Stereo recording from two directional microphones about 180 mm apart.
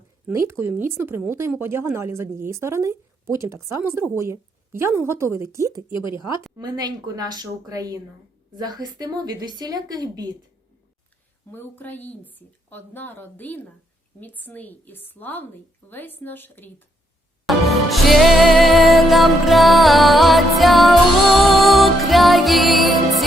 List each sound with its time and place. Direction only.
0.3 s a woman's voice: 15° right (ahead or behind)
11.5 s a woman's voice: 10° left (ahead or behind)
17.4 s music: centre (ahead or behind)